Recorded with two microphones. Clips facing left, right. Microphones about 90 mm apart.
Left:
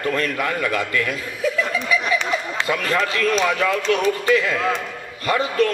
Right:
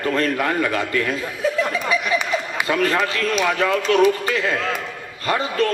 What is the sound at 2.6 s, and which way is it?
A man's voice, 35° right (ahead or behind).